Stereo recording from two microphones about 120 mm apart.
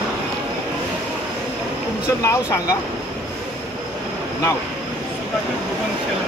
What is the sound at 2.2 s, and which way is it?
Speech, 25° left (ahead or behind).